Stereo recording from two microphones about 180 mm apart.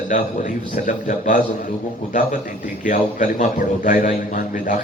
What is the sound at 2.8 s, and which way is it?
A man's voice, 45° left (ahead or behind).